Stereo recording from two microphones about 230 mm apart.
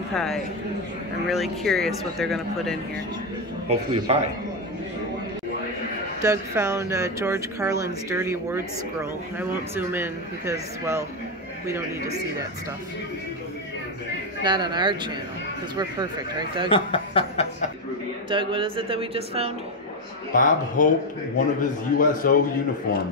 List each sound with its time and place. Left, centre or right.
0.1 s speech: centre
3.6 s speech: right
6.2 s a man's voice: centre
14.4 s speech: centre
16.6 s speech: left
18.3 s speech: right
20.3 s speech: left
21.9 s speech: left